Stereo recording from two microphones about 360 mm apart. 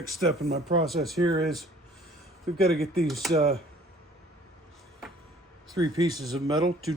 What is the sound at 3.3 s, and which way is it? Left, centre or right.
Speech, centre.